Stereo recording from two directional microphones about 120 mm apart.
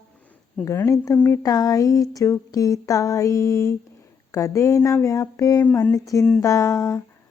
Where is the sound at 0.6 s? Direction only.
25° left (ahead or behind).